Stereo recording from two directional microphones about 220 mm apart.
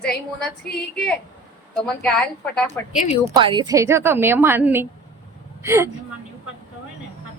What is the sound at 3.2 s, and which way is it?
A woman's voice, 20° right (ahead or behind).